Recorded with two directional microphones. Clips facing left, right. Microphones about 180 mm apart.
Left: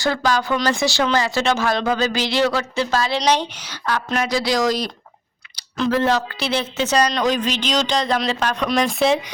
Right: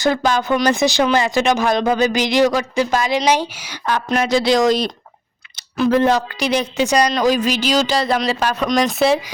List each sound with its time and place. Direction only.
0.0 s speech: 20° right (ahead or behind)
3.8 s speech: 20° right (ahead or behind)
5.7 s speech: 15° right (ahead or behind)